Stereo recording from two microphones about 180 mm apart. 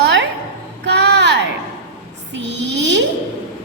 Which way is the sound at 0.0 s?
75° right (ahead or behind).